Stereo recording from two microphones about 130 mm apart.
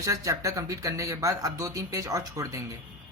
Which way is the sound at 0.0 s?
25° right (ahead or behind).